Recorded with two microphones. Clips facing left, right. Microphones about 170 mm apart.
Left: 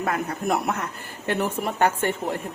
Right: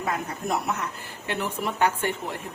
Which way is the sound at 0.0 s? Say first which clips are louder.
Left 3 dB; 55° left (ahead or behind).